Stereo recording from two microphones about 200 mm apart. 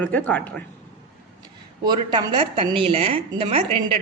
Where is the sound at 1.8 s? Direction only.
20° right (ahead or behind).